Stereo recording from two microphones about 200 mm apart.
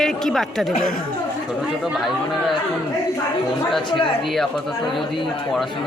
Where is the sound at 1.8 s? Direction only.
Centre (ahead or behind).